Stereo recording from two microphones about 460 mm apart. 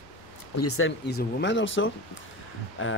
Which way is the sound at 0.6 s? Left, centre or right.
Left.